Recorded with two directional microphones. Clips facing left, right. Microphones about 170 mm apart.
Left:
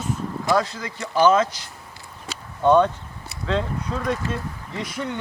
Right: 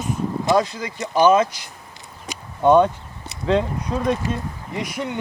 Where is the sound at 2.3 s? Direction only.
15° right (ahead or behind).